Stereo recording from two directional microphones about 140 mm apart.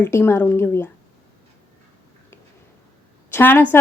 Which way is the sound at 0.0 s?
15° left (ahead or behind).